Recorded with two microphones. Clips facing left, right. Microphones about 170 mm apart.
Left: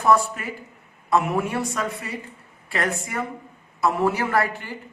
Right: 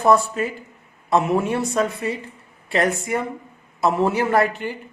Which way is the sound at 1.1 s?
25° right (ahead or behind).